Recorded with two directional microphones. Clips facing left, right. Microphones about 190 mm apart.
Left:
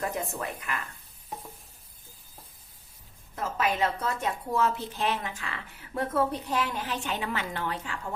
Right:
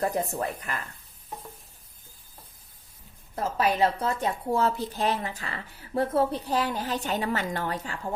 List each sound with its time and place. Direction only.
0.0 s speech: 35° right (ahead or behind)
3.3 s a woman's voice: 35° right (ahead or behind)